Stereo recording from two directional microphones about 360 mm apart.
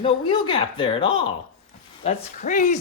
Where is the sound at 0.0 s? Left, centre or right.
Centre.